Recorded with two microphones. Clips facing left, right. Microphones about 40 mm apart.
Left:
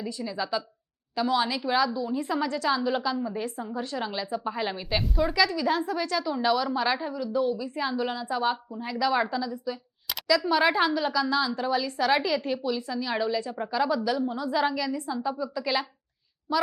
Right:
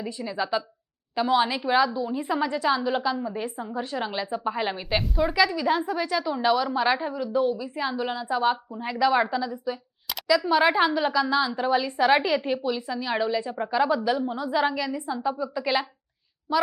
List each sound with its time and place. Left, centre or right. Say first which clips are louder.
0.0 s a woman's voice: right 2 dB; centre